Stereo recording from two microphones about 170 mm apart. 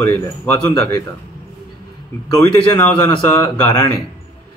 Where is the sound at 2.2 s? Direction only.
20° left (ahead or behind).